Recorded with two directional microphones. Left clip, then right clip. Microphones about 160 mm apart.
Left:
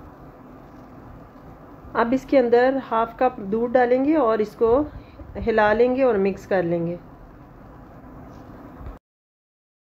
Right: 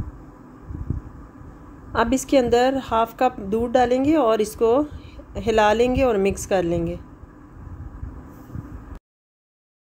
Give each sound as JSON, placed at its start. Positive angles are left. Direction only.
{"t": 1.9, "sound": "a woman's voice", "side_deg": -20}